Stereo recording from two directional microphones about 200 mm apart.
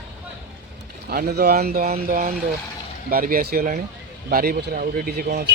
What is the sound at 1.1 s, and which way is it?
Speech, 50° right (ahead or behind).